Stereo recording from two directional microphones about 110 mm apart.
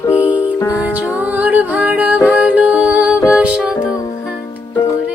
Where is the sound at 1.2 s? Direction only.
15° right (ahead or behind).